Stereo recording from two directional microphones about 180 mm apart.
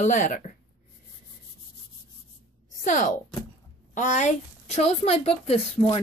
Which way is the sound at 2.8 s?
45° left (ahead or behind).